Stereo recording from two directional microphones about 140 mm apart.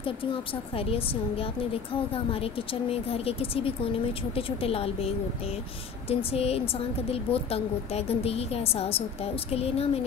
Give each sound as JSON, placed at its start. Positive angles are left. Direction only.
{"t": 0.7, "sound": "a woman's voice", "side_deg": 40}